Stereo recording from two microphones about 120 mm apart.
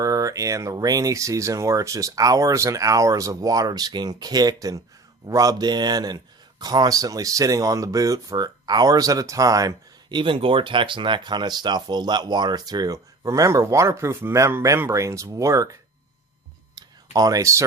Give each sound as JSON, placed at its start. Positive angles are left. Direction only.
{"t": 0.0, "sound": "speech", "side_deg": -30}
{"t": 16.7, "sound": "clicking", "side_deg": -30}